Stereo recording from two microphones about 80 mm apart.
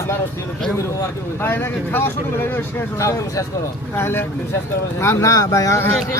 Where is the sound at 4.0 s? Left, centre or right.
Left.